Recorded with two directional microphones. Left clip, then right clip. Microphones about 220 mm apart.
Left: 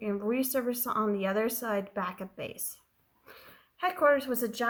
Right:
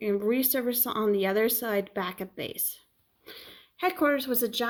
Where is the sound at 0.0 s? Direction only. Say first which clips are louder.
Right 4 dB; 35° right (ahead or behind).